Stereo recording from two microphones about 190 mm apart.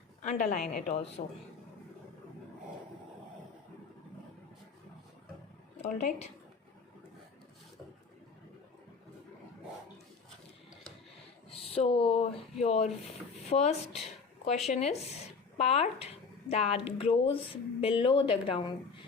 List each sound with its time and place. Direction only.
0.2 s speech: 40° left (ahead or behind)
5.8 s speech: 35° left (ahead or behind)
11.7 s speech: 30° left (ahead or behind)